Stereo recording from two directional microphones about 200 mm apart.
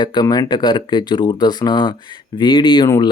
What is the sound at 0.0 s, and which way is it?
Speech, 20° left (ahead or behind).